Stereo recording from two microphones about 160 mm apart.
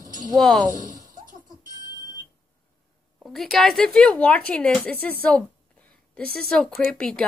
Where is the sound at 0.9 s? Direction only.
20° right (ahead or behind).